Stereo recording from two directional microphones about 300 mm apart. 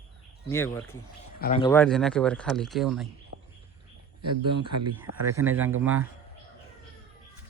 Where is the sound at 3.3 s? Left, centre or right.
Right.